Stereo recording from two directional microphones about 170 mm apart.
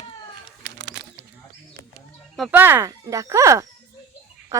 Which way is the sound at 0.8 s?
90° right.